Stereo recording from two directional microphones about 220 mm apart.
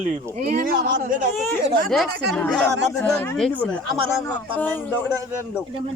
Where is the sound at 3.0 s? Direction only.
5° left (ahead or behind).